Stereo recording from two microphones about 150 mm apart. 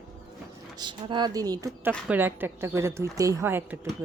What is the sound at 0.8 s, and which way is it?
Speech, 30° right (ahead or behind).